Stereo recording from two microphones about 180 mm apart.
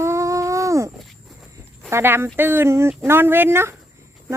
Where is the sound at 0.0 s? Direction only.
15° right (ahead or behind).